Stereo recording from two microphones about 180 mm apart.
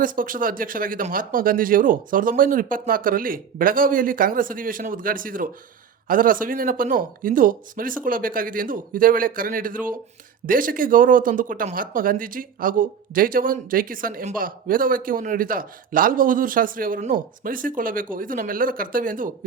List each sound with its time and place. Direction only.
0.0 s speech: 50° right (ahead or behind)